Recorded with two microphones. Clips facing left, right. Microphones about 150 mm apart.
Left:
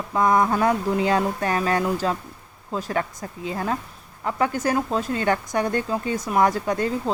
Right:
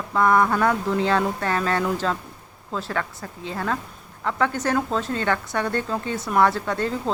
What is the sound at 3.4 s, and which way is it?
Speech, 15° left (ahead or behind).